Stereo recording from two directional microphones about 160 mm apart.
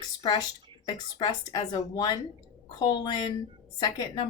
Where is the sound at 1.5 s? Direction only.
30° left (ahead or behind).